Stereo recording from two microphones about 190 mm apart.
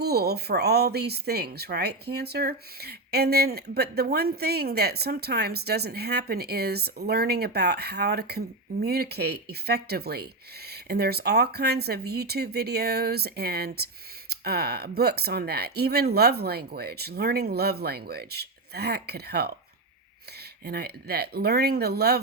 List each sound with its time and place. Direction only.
0.0 s speech: 55° right (ahead or behind)
20.7 s speech: 55° right (ahead or behind)